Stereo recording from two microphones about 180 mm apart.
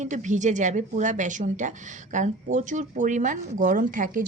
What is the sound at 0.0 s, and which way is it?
A woman's voice, 45° right (ahead or behind).